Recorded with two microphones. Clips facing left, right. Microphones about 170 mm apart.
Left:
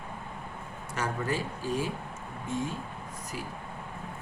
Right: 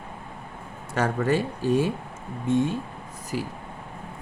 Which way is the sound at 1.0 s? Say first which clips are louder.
Right 8 dB; 75° right (ahead or behind).